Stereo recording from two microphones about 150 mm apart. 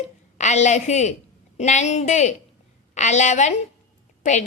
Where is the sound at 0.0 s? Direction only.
50° left (ahead or behind).